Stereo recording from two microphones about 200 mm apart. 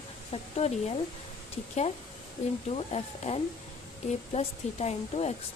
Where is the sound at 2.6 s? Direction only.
30° left (ahead or behind).